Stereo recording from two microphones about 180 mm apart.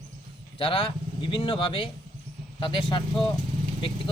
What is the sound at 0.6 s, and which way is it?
Speech, 30° left (ahead or behind).